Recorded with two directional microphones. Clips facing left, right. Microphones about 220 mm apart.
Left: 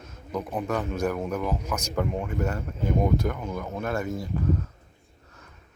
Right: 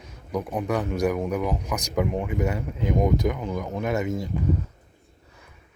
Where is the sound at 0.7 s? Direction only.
15° right (ahead or behind).